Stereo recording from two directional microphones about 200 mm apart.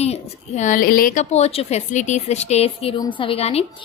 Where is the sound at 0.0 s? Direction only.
35° left (ahead or behind).